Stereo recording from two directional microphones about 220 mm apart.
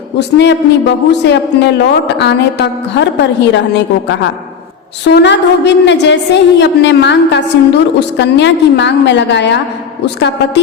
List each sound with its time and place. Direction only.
0.3 s a woman's voice: 50° left (ahead or behind)
5.0 s a woman's voice: 50° left (ahead or behind)